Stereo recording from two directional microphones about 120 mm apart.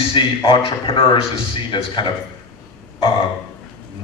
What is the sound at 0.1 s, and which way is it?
A man's voice, 45° left (ahead or behind).